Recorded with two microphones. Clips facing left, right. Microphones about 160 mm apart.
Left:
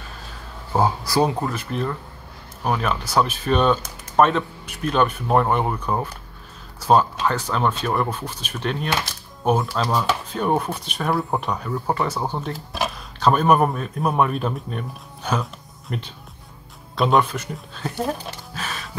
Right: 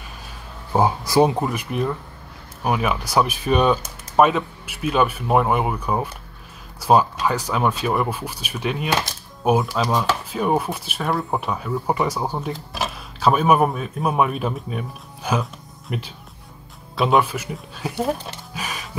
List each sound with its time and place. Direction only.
0.7 s speech: 20° right (ahead or behind)